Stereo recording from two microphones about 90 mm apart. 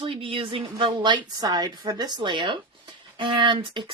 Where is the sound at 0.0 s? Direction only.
90° right.